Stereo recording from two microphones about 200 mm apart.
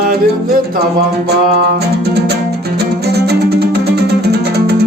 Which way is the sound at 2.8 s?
55° right (ahead or behind).